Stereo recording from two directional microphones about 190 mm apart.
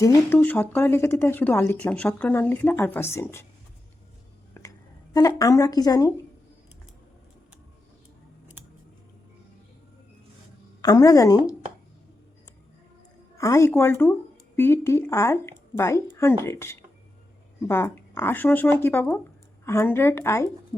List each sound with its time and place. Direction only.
0.0 s speech: 15° left (ahead or behind)
4.6 s whispering: 15° left (ahead or behind)
5.1 s a woman's voice: 20° left (ahead or behind)
10.8 s a woman's voice: 20° left (ahead or behind)
13.3 s speech: 15° left (ahead or behind)